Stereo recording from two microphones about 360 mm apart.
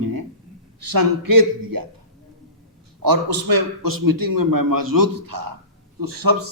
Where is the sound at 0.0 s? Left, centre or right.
Right.